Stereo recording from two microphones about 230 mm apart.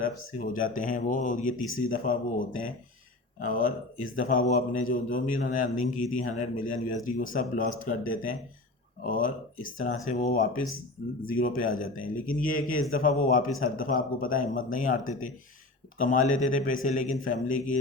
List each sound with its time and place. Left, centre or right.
0.3 s a man's voice: left